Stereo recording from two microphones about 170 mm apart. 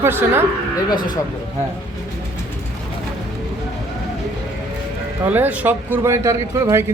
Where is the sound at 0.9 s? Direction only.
25° left (ahead or behind).